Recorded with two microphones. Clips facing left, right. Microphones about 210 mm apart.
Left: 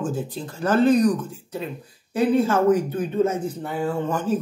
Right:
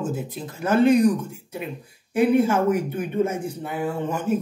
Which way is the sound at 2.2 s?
10° right (ahead or behind).